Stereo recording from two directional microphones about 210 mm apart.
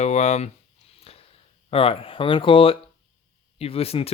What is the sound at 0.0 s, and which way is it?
Speech, 35° left (ahead or behind).